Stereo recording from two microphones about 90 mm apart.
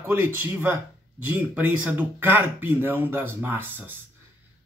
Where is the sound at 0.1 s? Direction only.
20° right (ahead or behind).